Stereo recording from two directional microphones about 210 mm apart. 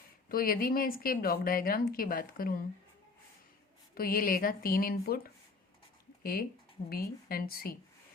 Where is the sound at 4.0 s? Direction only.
45° left (ahead or behind).